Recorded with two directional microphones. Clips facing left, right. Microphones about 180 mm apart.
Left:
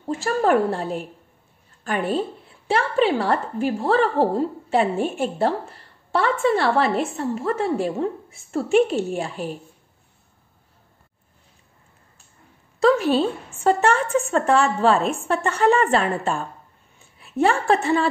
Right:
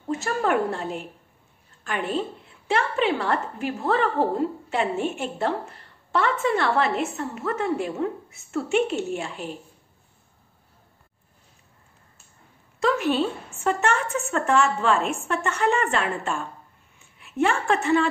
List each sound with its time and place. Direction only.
0.1 s a woman's voice: 35° left (ahead or behind)
12.8 s a woman's voice: 35° left (ahead or behind)